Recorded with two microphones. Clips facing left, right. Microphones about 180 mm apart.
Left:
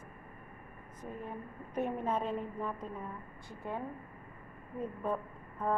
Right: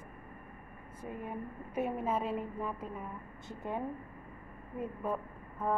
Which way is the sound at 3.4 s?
20° right (ahead or behind).